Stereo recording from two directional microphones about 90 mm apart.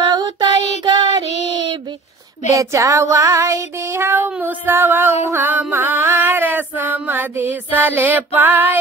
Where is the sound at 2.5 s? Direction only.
35° right (ahead or behind).